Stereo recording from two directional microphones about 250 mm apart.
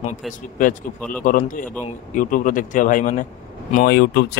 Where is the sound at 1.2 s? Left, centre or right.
Left.